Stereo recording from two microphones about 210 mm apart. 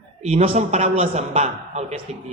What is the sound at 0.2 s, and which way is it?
A man's voice, 30° right (ahead or behind).